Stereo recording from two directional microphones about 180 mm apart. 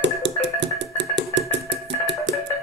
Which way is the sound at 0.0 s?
85° right.